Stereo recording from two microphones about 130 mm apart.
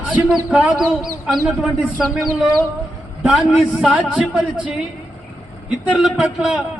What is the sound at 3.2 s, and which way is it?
A man's voice, 10° right (ahead or behind).